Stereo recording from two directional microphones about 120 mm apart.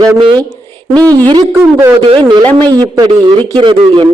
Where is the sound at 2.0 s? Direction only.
45° right (ahead or behind).